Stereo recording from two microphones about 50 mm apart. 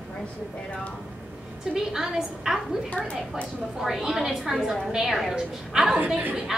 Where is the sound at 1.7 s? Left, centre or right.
Centre.